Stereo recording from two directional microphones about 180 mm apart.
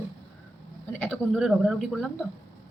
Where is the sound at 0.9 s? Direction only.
10° left (ahead or behind).